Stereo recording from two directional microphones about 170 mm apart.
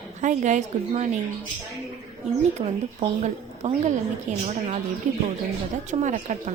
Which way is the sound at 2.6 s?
40° right (ahead or behind).